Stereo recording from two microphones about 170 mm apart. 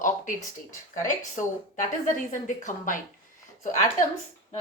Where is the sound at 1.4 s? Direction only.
50° left (ahead or behind).